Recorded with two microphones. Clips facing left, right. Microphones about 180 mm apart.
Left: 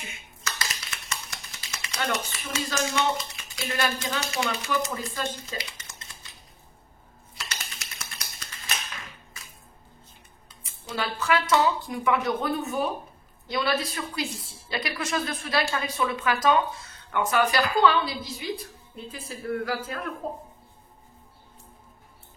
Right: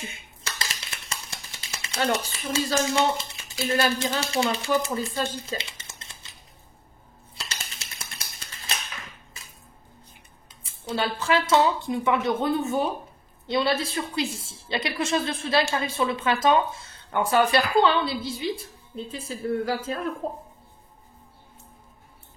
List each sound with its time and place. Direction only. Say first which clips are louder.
0.0 s speech: right 1 dB; 30° right (ahead or behind)
7.3 s a sound: even; 30° right (ahead or behind)
10.6 s a woman's voice: right 4 dB; 30° right (ahead or behind)